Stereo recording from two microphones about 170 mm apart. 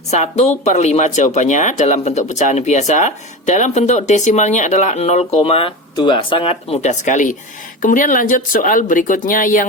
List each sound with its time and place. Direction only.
0.1 s speech: 40° left (ahead or behind)